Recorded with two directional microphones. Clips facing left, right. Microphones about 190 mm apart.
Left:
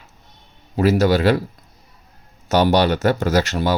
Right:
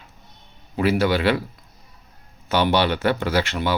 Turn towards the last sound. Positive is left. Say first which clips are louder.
# left 4 dB
turn(degrees=40)  # may be behind; listen again after turning